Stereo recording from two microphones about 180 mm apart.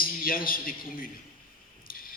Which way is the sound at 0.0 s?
55° left (ahead or behind).